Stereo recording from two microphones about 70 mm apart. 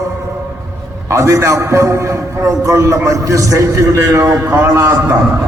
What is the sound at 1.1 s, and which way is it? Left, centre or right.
A man's voice, right.